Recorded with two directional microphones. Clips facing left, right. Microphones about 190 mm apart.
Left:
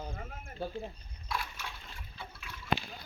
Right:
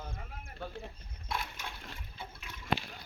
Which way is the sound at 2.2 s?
20° right (ahead or behind).